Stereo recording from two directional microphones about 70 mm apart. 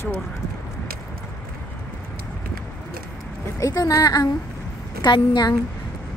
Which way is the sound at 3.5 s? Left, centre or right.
Left.